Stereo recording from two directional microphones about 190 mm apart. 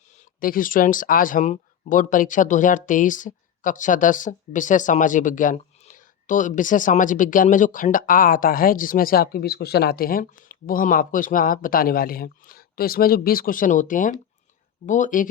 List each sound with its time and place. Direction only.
0.3 s speech: 45° left (ahead or behind)